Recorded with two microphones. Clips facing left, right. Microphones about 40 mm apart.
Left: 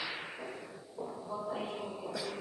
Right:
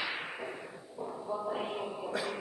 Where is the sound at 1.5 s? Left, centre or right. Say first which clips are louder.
Right 2 dB; right.